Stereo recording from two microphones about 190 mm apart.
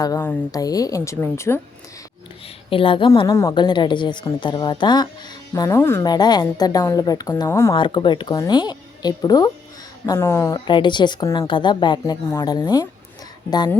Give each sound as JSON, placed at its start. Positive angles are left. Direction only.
{"t": 0.0, "sound": "a woman's voice", "side_deg": 15}
{"t": 2.6, "sound": "a woman's voice", "side_deg": 30}
{"t": 7.8, "sound": "a woman's voice", "side_deg": 25}
{"t": 10.7, "sound": "a woman's voice", "side_deg": 25}